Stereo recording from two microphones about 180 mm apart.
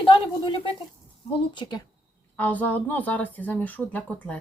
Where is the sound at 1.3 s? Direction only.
25° left (ahead or behind).